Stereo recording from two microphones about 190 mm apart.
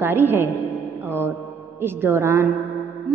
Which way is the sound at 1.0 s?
10° right (ahead or behind).